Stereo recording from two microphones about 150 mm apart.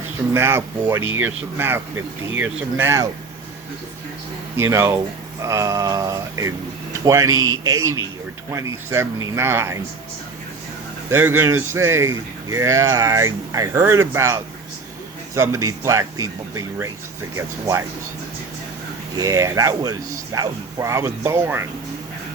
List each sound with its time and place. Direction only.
0.3 s speech: 15° right (ahead or behind)
4.5 s speech: 15° right (ahead or behind)
11.1 s speech: 15° right (ahead or behind)
19.1 s speech: 20° right (ahead or behind)